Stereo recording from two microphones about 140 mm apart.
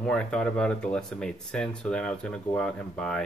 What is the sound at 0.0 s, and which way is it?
Speech, 5° left (ahead or behind).